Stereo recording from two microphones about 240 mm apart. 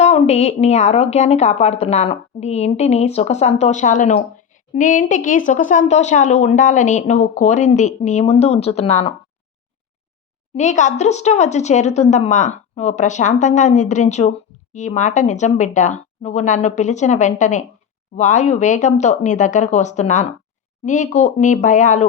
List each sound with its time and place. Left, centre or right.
0.0 s a woman's voice: left
10.5 s a woman's voice: left